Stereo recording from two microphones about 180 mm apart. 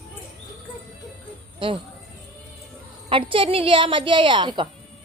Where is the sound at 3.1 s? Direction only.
30° right (ahead or behind).